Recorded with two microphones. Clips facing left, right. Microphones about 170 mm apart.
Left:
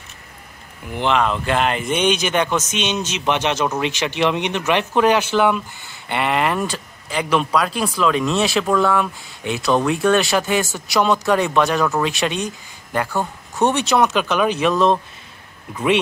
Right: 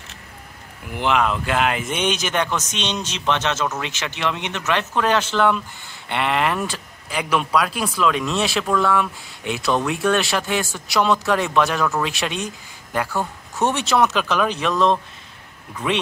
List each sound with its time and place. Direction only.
0.9 s speech: 5° right (ahead or behind)